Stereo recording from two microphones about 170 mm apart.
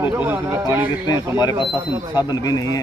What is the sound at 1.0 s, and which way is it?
Speech, 25° left (ahead or behind).